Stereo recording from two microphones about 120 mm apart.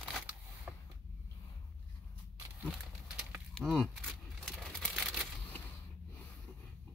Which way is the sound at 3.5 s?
5° left (ahead or behind).